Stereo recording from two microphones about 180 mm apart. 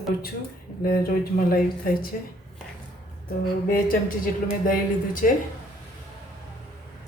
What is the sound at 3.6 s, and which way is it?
Speech, 50° left (ahead or behind).